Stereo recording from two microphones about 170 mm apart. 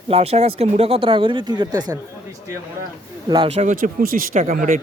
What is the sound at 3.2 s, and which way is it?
Speech, 25° right (ahead or behind).